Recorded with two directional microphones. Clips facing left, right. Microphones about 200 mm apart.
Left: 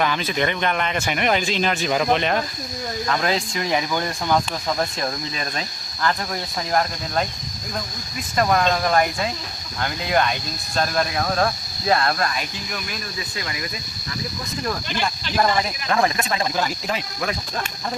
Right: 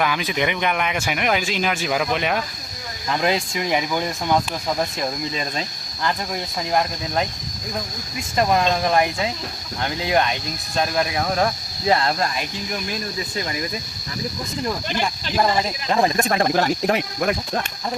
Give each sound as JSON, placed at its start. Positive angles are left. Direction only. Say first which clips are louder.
{"t": 0.0, "sound": "speech", "louder": "even", "side_deg": -10}
{"t": 5.3, "sound": "speech", "louder": "right 2 dB", "side_deg": -20}
{"t": 8.4, "sound": "speech", "louder": "even", "side_deg": -20}
{"t": 12.9, "sound": "speech", "louder": "right 4 dB", "side_deg": -35}
{"t": 15.4, "sound": "speech", "louder": "right 1 dB", "side_deg": -25}
{"t": 16.1, "sound": "speech", "louder": "right 5 dB", "side_deg": -50}